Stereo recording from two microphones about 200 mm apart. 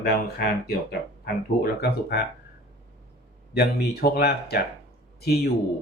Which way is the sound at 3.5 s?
55° left (ahead or behind).